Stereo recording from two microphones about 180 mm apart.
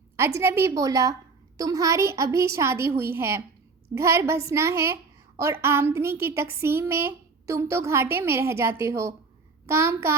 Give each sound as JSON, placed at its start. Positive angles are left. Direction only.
{"t": 0.2, "sound": "a woman's voice", "side_deg": -15}